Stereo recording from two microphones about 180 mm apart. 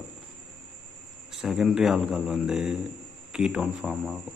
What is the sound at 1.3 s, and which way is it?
Speech, centre (ahead or behind).